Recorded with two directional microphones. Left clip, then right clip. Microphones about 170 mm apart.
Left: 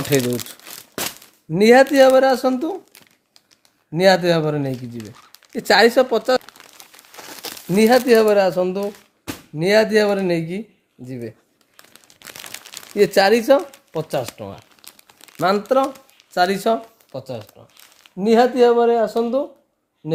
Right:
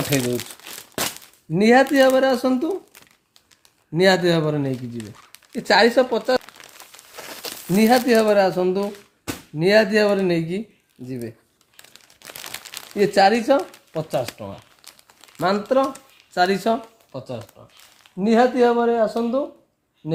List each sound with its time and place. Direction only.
1.5 s speech: 65° left (ahead or behind)
3.9 s speech: 55° left (ahead or behind)
5.5 s speech: 70° left (ahead or behind)
7.2 s a sound: 15° left (ahead or behind)
7.7 s speech: 60° left (ahead or behind)
11.9 s crumpling: 20° left (ahead or behind)
13.0 s speech: 70° left (ahead or behind)
15.4 s speech: 65° left (ahead or behind)